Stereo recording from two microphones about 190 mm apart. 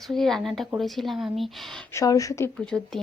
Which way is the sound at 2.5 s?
5° left (ahead or behind).